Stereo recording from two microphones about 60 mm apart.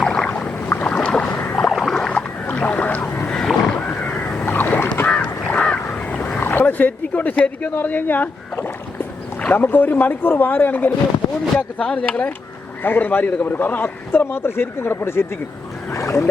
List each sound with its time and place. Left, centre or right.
0.0 s boat: centre
1.7 s boat: centre
2.0 s boat: left
3.3 s a sound: centre
3.8 s a sound: left
4.5 s boat: left
5.0 s boat: left
6.4 s a sound: left
7.8 s a man's voice: left
11.8 s speech: centre
12.8 s a man's voice: left
15.9 s boat: left